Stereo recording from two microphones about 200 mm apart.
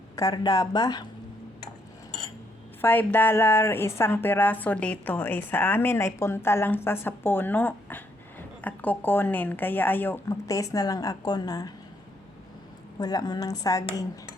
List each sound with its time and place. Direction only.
0.2 s a woman's voice: 20° left (ahead or behind)
2.8 s speech: 10° left (ahead or behind)
13.0 s a woman's voice: 20° left (ahead or behind)